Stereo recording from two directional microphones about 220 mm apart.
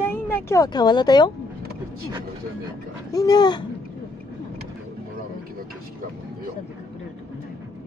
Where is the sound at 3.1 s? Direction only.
15° left (ahead or behind).